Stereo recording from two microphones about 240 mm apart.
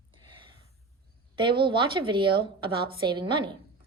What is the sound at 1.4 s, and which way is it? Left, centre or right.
A woman's voice, centre.